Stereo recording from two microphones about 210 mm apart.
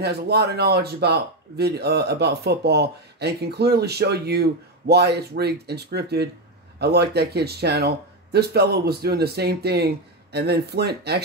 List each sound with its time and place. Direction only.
0.0 s speech: 50° right (ahead or behind)